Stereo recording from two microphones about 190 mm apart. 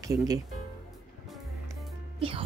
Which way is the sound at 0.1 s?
20° right (ahead or behind).